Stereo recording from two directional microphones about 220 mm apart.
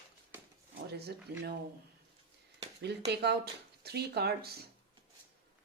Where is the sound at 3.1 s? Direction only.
50° right (ahead or behind).